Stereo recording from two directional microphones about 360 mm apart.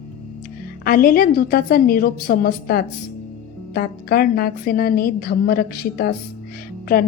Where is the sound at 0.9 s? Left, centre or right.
Left.